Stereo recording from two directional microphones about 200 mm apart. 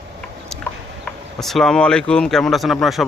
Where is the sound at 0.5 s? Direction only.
Centre (ahead or behind).